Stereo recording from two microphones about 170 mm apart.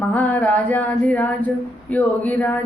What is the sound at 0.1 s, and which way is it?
Speech, 10° left (ahead or behind).